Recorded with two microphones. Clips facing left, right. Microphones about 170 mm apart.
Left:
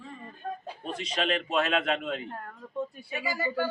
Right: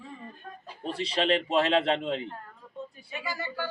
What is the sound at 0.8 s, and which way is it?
A man's voice, 30° right (ahead or behind).